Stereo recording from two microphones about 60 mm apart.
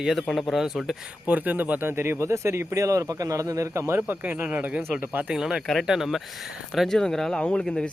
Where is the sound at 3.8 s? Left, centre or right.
Right.